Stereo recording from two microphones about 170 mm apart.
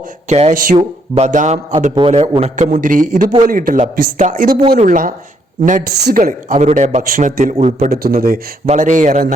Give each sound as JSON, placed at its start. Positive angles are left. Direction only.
{"t": 0.3, "sound": "a man's voice", "side_deg": -40}
{"t": 2.7, "sound": "speech", "side_deg": -50}
{"t": 5.8, "sound": "speech", "side_deg": -70}
{"t": 7.9, "sound": "speech", "side_deg": -65}
{"t": 8.6, "sound": "speech", "side_deg": -45}